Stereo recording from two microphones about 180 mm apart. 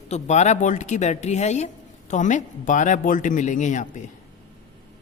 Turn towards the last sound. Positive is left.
turn(degrees=45)  # may be behind; listen again after turning